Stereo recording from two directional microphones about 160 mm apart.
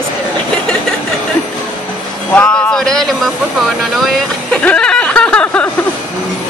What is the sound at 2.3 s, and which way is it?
Speech, 5° left (ahead or behind).